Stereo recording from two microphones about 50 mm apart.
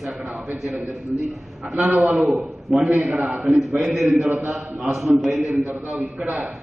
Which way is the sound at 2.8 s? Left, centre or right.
Right.